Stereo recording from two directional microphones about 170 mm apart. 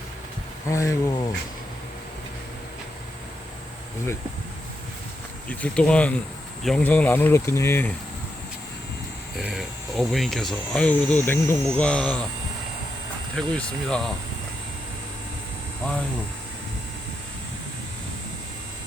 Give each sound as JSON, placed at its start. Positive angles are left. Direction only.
{"t": 0.7, "sound": "speech", "side_deg": 20}
{"t": 5.5, "sound": "speech", "side_deg": 5}
{"t": 9.4, "sound": "speech", "side_deg": -5}
{"t": 13.3, "sound": "speech", "side_deg": 5}